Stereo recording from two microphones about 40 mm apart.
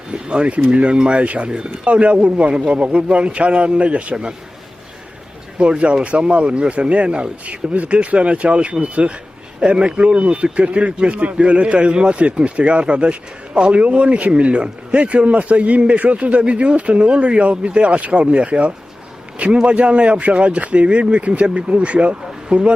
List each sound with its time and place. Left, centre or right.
0.1 s a man's voice: right
4.1 s a man's voice: centre
5.5 s a man's voice: right